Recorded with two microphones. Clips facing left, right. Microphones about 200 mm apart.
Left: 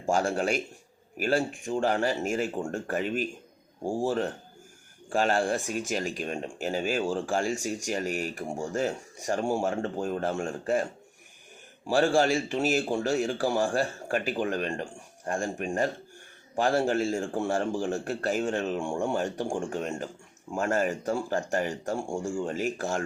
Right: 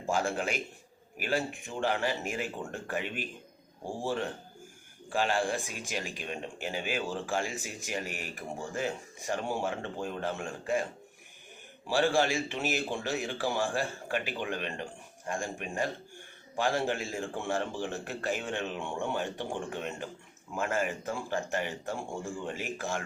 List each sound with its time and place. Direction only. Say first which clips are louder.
0.0 s a man's voice: left 4 dB; 40° left (ahead or behind)
11.9 s a man's voice: left 4 dB; 45° left (ahead or behind)